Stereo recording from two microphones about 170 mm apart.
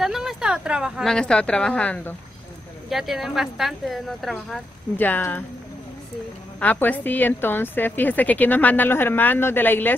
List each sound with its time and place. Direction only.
0.0 s a woman's voice: centre (ahead or behind)
6.6 s a woman's voice: 10° left (ahead or behind)